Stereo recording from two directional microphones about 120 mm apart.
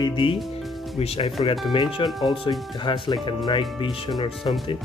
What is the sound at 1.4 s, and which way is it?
Speech, 50° left (ahead or behind).